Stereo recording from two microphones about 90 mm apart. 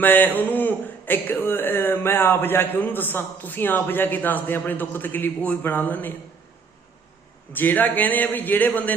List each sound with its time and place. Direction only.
0.0 s speech: 20° left (ahead or behind)
7.5 s speech: 20° left (ahead or behind)